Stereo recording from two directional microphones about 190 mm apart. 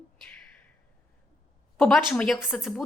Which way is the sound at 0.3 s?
5° left (ahead or behind).